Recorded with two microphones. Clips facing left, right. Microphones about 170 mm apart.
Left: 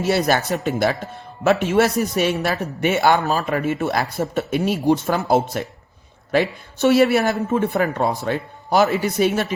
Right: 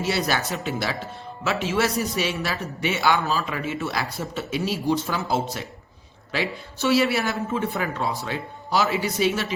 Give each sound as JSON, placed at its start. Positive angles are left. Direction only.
{"t": 0.0, "sound": "a man's voice", "side_deg": 50}